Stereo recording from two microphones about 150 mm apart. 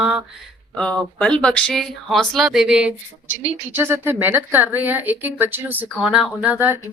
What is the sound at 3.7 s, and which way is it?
Speech, 15° right (ahead or behind).